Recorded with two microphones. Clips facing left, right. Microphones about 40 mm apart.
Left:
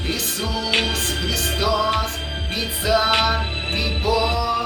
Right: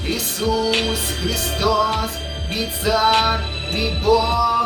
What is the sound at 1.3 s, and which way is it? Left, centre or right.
Music, centre.